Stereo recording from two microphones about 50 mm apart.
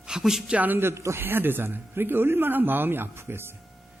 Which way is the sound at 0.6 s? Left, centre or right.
Right.